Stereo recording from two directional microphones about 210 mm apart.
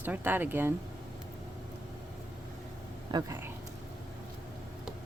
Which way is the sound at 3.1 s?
15° right (ahead or behind).